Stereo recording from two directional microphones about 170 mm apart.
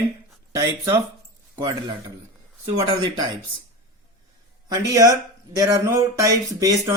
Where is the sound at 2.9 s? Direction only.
25° right (ahead or behind).